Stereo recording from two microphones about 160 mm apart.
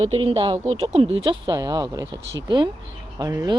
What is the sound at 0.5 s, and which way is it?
Speech, 20° right (ahead or behind).